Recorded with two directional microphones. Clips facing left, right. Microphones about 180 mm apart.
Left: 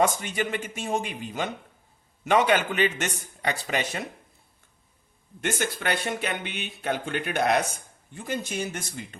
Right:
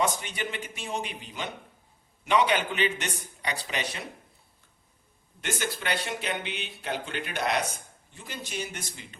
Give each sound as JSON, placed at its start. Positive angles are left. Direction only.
{"t": 0.0, "sound": "a man's voice", "side_deg": 45}
{"t": 5.8, "sound": "a man's voice", "side_deg": 50}